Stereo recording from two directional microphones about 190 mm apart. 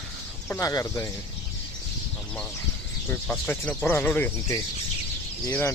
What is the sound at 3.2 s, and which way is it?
Speech, 10° left (ahead or behind).